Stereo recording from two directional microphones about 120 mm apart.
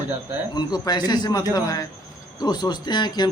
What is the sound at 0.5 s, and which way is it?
A man's voice, 35° left (ahead or behind).